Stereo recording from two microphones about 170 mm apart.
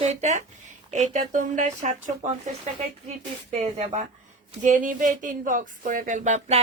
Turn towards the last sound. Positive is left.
turn(degrees=-45)  # may be behind; listen again after turning